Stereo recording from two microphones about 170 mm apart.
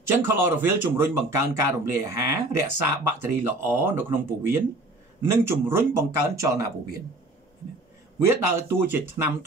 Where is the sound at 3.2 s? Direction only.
15° right (ahead or behind).